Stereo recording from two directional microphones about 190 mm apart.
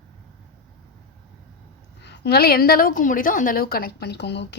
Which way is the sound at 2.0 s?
60° left (ahead or behind).